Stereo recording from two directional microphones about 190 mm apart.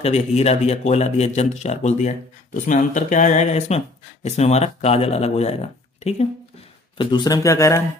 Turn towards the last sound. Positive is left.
turn(degrees=15)  # may be behind; listen again after turning